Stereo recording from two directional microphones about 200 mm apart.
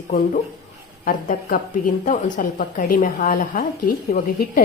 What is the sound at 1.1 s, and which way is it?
A woman's voice, 45° left (ahead or behind).